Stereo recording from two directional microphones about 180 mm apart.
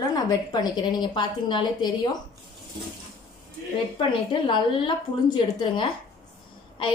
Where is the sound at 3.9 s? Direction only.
25° left (ahead or behind).